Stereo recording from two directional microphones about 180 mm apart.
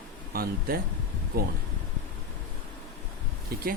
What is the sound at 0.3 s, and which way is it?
Speech, 50° right (ahead or behind).